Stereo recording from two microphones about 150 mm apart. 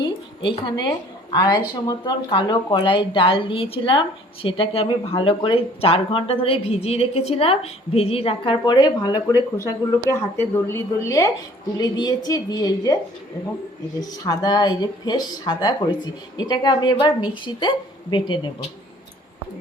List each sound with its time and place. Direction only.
0.0 s a woman's voice: 35° left (ahead or behind)
14.0 s speech: 25° left (ahead or behind)